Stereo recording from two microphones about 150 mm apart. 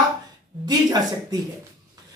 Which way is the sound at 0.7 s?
25° right (ahead or behind).